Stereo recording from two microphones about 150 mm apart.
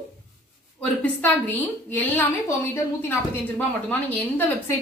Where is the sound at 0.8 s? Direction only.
10° left (ahead or behind).